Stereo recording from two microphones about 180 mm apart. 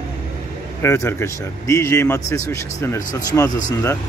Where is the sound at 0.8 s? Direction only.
15° left (ahead or behind).